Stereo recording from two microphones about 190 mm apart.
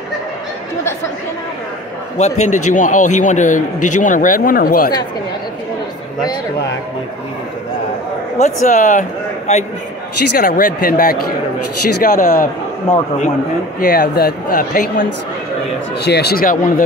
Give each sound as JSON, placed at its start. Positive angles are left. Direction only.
{"t": 2.1, "sound": "a man's voice", "side_deg": 35}
{"t": 8.4, "sound": "speech", "side_deg": 40}
{"t": 10.3, "sound": "a man's voice", "side_deg": 50}
{"t": 13.7, "sound": "a man's voice", "side_deg": 50}
{"t": 15.9, "sound": "speech", "side_deg": 60}